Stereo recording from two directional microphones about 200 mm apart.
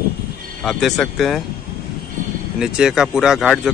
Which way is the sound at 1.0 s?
Centre (ahead or behind).